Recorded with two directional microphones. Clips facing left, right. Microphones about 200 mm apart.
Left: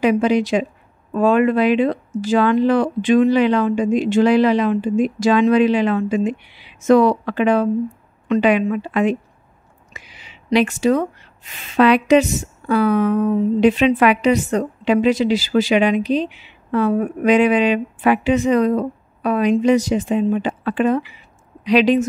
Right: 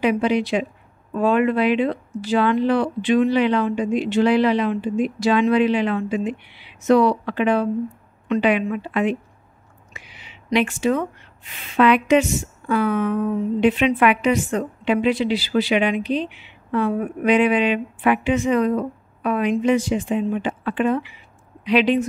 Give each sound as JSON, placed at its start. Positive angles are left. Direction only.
{"t": 0.0, "sound": "a woman's voice", "side_deg": 40}
{"t": 9.9, "sound": "a sound", "side_deg": 40}
{"t": 11.7, "sound": "a woman's voice", "side_deg": 35}